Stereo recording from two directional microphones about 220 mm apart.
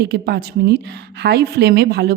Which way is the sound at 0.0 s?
45° right (ahead or behind).